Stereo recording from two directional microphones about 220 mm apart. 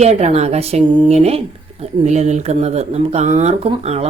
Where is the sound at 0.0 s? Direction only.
30° right (ahead or behind).